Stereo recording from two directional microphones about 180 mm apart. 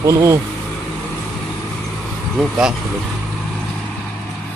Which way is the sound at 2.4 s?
5° right (ahead or behind).